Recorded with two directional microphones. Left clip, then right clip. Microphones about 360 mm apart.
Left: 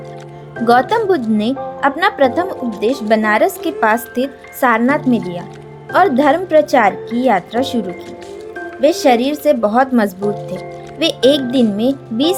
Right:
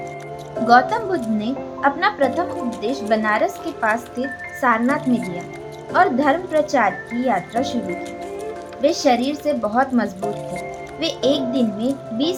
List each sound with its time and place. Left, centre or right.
0.7 s speech: left
8.8 s speech: left